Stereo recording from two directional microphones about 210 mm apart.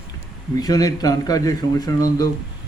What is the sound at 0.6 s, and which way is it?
Speech, 15° left (ahead or behind).